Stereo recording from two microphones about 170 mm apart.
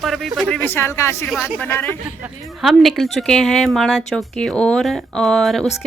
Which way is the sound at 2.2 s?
Centre (ahead or behind).